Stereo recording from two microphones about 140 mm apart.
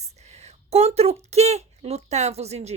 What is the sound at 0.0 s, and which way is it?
Speech, 50° right (ahead or behind).